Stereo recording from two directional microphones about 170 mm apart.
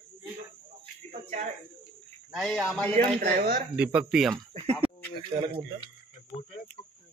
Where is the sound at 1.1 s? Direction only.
45° right (ahead or behind).